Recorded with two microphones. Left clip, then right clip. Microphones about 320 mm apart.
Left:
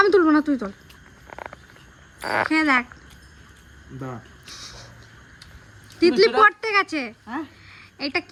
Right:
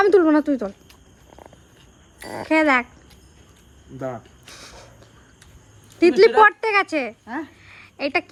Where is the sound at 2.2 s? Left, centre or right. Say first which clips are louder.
Left 10 dB; right.